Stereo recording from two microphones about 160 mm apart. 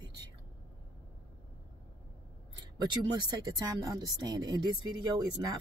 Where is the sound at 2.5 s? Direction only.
25° right (ahead or behind).